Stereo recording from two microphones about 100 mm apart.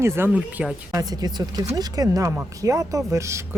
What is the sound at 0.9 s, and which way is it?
Speech, 40° right (ahead or behind).